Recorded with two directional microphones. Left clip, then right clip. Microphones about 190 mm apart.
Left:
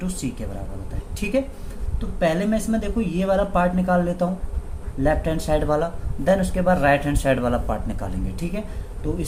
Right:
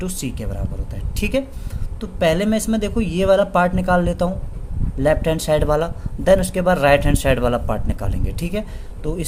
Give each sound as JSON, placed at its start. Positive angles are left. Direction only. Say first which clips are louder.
{"t": 0.0, "sound": "speech", "louder": "right 3 dB", "side_deg": -50}